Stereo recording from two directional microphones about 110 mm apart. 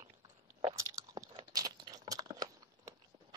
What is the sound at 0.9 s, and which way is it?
Crunch, 35° right (ahead or behind).